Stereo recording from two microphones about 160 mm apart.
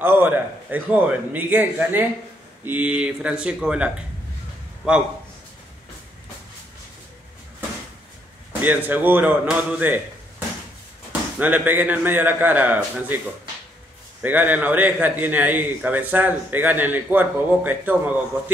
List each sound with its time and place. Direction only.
0.0 s a man's voice: 10° right (ahead or behind)
8.6 s a man's voice: 10° right (ahead or behind)
11.1 s a man's voice: 10° right (ahead or behind)
14.2 s a man's voice: 10° right (ahead or behind)